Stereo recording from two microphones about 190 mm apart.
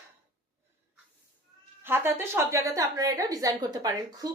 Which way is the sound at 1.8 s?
10° right (ahead or behind).